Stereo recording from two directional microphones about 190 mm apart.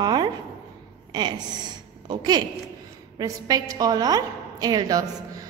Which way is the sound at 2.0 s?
20° right (ahead or behind).